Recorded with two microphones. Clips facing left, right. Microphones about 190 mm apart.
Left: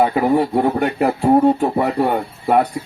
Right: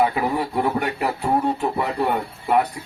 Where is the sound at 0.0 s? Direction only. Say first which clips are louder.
Left 6 dB; 30° left (ahead or behind).